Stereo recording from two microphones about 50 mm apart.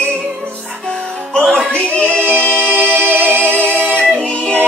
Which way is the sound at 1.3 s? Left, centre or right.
Centre.